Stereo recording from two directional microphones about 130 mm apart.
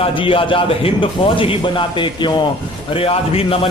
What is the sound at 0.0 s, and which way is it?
A man's voice, 40° left (ahead or behind).